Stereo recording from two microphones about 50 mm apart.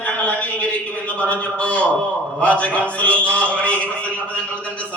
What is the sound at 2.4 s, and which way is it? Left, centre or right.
A man's voice, left.